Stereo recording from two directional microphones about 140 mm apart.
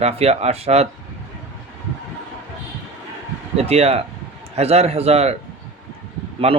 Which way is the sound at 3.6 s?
45° right (ahead or behind).